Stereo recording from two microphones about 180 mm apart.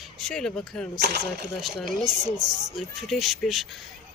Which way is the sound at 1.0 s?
65° right (ahead or behind).